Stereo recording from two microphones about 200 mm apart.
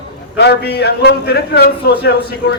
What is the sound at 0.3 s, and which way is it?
A man's voice, 55° left (ahead or behind).